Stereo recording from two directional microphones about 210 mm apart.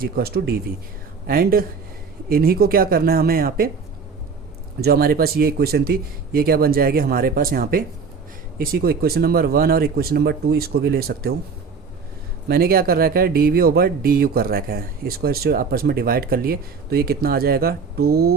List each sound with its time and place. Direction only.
0.0 s speech: 45° right (ahead or behind)
4.8 s speech: 45° right (ahead or behind)
12.5 s speech: 45° right (ahead or behind)